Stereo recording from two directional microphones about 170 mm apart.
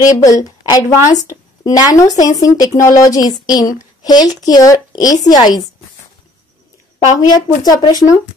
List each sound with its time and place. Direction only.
0.0 s speech: 20° left (ahead or behind)
7.2 s speech: 25° left (ahead or behind)